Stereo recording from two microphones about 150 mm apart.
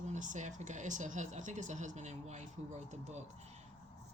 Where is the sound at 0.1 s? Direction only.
55° right (ahead or behind).